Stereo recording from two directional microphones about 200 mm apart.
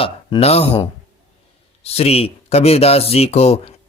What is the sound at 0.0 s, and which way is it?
Speech, 30° left (ahead or behind).